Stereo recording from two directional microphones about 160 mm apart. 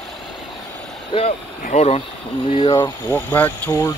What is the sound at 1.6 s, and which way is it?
Speech, 45° left (ahead or behind).